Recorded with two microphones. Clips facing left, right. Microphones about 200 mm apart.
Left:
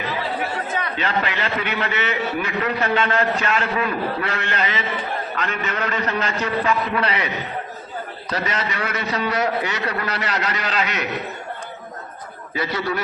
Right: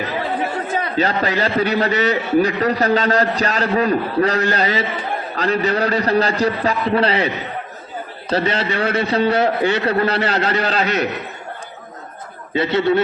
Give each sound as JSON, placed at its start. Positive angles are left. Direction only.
{"t": 0.8, "sound": "a man's voice", "side_deg": -40}
{"t": 8.3, "sound": "a man's voice", "side_deg": -30}
{"t": 12.5, "sound": "a man's voice", "side_deg": -25}